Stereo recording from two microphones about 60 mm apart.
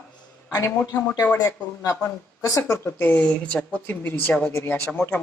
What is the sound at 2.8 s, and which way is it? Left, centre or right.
Speech, left.